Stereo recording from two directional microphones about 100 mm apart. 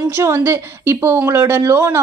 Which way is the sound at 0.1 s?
25° right (ahead or behind).